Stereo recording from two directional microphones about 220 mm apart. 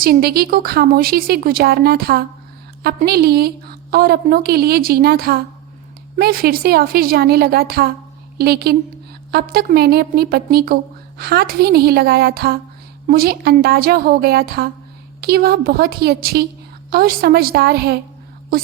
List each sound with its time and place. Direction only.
0.0 s a woman's voice: 45° right (ahead or behind)